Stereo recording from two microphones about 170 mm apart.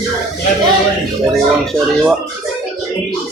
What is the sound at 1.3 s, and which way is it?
Speech, centre (ahead or behind).